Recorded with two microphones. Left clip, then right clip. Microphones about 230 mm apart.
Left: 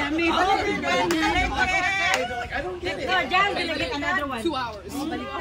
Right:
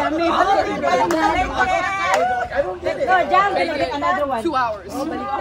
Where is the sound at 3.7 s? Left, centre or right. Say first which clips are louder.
Right 6 dB; right.